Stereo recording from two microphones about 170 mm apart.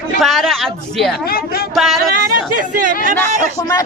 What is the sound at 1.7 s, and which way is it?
Speech, centre (ahead or behind).